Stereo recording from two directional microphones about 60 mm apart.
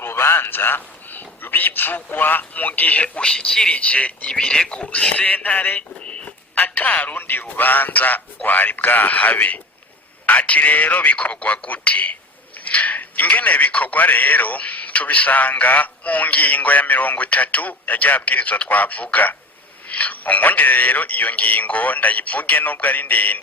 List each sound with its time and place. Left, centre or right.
0.0 s a man's voice: left; by 3.8 s centre
3.8 s a man's voice: left